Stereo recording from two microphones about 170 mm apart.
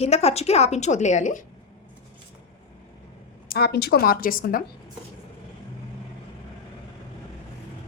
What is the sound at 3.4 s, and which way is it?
A woman's voice, 70° left (ahead or behind).